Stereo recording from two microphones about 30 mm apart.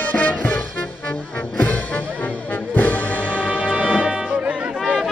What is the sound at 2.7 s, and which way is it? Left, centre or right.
Music, left.